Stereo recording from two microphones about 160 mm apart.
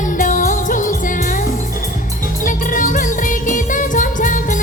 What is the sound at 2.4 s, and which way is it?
Music, 55° left (ahead or behind).